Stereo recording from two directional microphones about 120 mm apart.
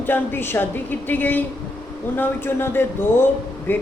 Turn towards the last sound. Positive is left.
turn(degrees=15)  # may be behind; listen again after turning